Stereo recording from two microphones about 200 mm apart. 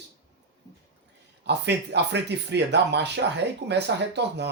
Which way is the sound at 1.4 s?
60° right (ahead or behind).